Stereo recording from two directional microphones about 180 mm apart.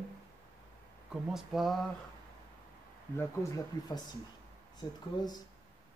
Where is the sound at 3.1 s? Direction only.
20° left (ahead or behind).